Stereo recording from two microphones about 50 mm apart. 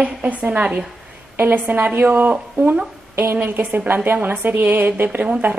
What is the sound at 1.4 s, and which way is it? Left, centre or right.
A woman's voice, right.